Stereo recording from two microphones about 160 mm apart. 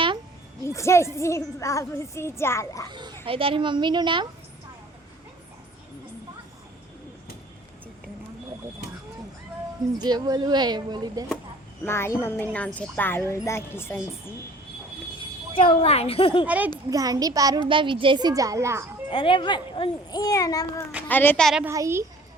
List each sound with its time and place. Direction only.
0.6 s a woman's voice: 20° left (ahead or behind)
2.9 s a child's voice: 30° right (ahead or behind)
10.0 s a child's voice: 25° right (ahead or behind)
11.9 s a woman's voice: 15° left (ahead or behind)
15.2 s speech: 35° left (ahead or behind)
16.5 s a child's voice: 10° right (ahead or behind)
16.9 s a child's voice: 20° right (ahead or behind)
19.1 s a child's voice: 30° left (ahead or behind)
21.1 s a woman's voice: 10° left (ahead or behind)
21.6 s a child's voice: 15° right (ahead or behind)